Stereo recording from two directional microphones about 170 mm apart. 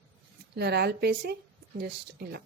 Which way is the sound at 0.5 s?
75° right (ahead or behind).